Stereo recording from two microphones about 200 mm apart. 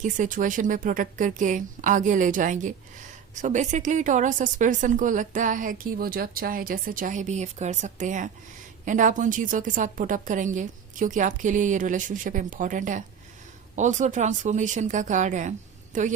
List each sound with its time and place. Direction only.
0.0 s a woman's voice: 40° right (ahead or behind)